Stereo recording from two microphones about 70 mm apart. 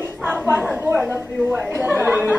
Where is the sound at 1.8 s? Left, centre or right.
Right.